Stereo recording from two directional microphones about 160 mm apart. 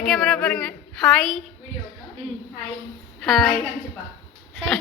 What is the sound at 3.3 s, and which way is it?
Speech, centre (ahead or behind).